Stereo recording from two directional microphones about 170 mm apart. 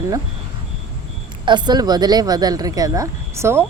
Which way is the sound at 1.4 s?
25° right (ahead or behind).